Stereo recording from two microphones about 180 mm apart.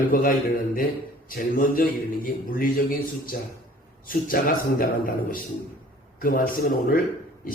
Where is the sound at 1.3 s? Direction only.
50° left (ahead or behind).